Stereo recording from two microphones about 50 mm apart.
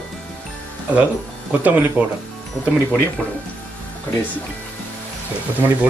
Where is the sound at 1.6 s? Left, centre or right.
Right.